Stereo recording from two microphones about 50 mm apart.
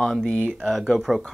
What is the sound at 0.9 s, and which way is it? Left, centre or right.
Speech, centre.